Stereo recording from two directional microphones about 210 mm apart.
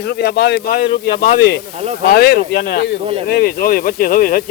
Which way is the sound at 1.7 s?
30° right (ahead or behind).